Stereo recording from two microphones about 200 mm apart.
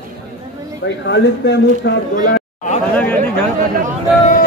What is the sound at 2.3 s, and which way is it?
Chatter, 40° left (ahead or behind).